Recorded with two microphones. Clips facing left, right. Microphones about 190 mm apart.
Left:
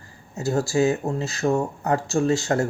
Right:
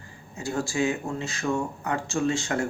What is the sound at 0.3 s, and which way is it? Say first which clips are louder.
Speech: left 6 dB; 40° left (ahead or behind).